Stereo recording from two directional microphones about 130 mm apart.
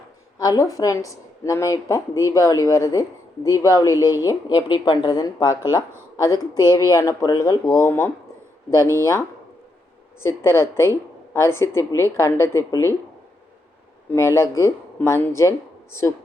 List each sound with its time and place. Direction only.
0.3 s a woman's voice: 30° left (ahead or behind)
6.7 s a woman's voice: 25° left (ahead or behind)
10.2 s a woman's voice: 20° left (ahead or behind)
14.1 s a woman's voice: 20° left (ahead or behind)